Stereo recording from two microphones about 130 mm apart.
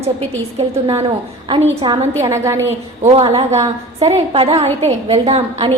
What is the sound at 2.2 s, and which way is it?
Speech, 25° right (ahead or behind).